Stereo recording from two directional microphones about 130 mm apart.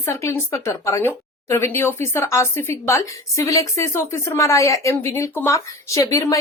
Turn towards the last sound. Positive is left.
turn(degrees=25)  # may be behind; listen again after turning